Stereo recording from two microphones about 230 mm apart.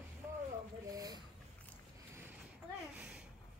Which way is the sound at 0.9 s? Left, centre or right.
Centre.